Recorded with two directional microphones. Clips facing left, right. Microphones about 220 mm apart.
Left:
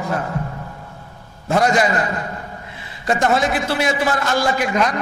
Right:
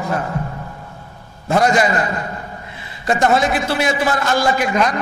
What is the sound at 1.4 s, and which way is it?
A man's voice, 15° right (ahead or behind).